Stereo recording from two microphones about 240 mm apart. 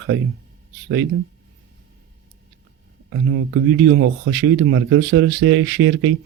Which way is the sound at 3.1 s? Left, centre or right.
Right.